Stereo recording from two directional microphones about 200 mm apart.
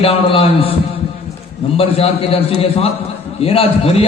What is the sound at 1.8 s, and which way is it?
A man's voice, 30° left (ahead or behind).